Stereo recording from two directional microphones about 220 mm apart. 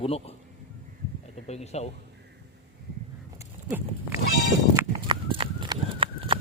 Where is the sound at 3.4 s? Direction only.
10° right (ahead or behind).